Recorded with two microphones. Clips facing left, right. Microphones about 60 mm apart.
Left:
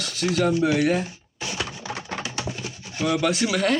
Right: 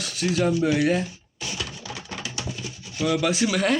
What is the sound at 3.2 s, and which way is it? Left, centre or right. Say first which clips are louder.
Speech: left 1 dB; centre.